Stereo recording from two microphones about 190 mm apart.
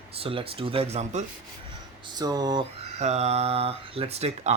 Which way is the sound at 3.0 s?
35° right (ahead or behind).